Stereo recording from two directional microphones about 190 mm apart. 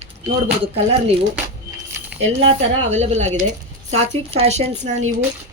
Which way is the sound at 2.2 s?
30° right (ahead or behind).